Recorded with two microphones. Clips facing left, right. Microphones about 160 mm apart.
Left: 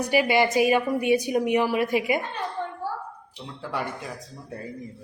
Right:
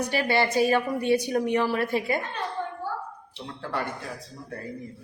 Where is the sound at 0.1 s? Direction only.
15° left (ahead or behind).